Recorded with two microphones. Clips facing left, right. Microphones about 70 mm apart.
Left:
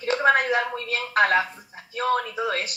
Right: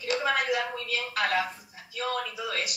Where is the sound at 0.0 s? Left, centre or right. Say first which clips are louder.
Left 7 dB; left.